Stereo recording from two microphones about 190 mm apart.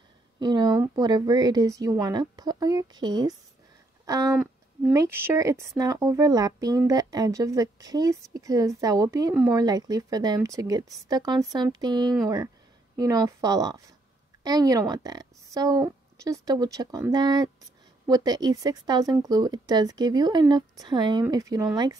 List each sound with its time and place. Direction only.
0.4 s speech: 20° right (ahead or behind)
4.0 s a sound: 20° right (ahead or behind)
4.9 s a woman's voice: 15° right (ahead or behind)